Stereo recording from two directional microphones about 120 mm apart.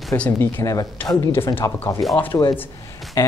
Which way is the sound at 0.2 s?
20° left (ahead or behind).